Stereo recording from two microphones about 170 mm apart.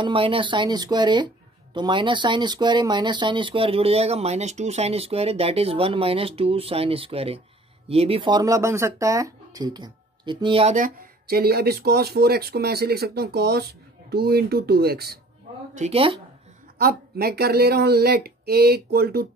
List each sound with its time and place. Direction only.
0.0 s speech: 30° right (ahead or behind)
10.8 s speech: 60° right (ahead or behind)
15.7 s speech: 40° right (ahead or behind)
16.7 s speech: 65° right (ahead or behind)